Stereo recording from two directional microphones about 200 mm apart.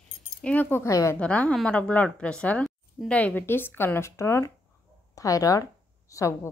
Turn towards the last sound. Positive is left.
turn(degrees=15)  # may be behind; listen again after turning